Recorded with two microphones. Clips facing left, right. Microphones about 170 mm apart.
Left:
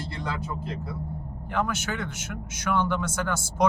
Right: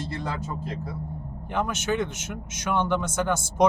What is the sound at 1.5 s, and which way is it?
A man's voice, 20° right (ahead or behind).